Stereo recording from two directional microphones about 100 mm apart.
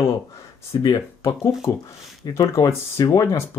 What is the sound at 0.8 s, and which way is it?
Speech, 30° left (ahead or behind).